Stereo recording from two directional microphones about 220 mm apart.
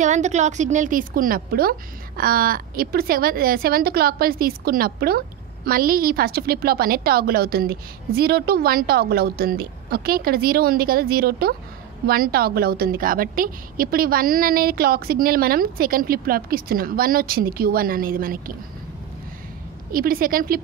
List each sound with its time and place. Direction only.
0.0 s a woman's voice: 30° right (ahead or behind)
19.9 s a woman's voice: 40° right (ahead or behind)